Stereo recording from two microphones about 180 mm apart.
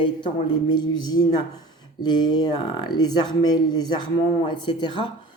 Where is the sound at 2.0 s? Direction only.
25° left (ahead or behind).